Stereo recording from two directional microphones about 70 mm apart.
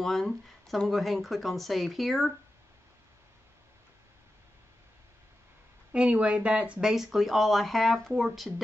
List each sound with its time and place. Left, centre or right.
0.0 s speech: centre
5.9 s speech: centre
6.9 s speech: centre